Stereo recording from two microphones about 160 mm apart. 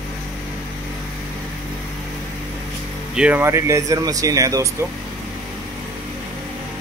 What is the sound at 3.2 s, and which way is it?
Speech, 10° right (ahead or behind).